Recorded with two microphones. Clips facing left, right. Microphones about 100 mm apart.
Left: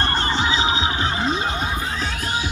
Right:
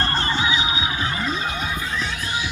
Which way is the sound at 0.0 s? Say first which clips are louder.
Left 1 dB; 20° left (ahead or behind).